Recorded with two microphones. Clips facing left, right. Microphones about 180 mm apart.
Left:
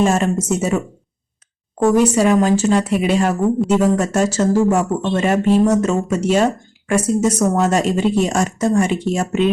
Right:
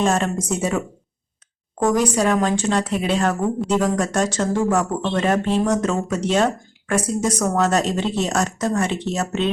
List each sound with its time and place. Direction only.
0.0 s speech: 10° left (ahead or behind)
1.8 s speech: 5° left (ahead or behind)